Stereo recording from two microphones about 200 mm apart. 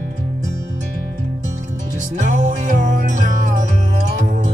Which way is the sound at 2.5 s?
40° right (ahead or behind).